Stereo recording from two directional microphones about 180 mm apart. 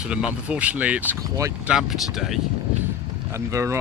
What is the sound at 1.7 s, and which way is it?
Speech, centre (ahead or behind).